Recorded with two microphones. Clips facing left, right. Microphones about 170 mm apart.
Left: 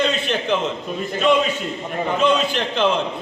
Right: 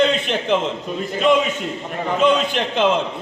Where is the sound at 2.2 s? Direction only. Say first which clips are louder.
Right 2 dB; 15° right (ahead or behind).